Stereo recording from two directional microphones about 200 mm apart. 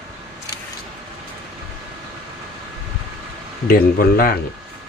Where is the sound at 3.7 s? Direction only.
50° left (ahead or behind).